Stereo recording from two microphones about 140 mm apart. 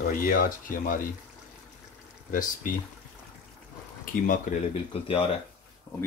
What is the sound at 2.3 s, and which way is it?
Speech, 75° left (ahead or behind).